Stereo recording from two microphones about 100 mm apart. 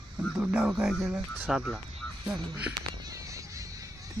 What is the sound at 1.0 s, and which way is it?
Speech, 20° right (ahead or behind).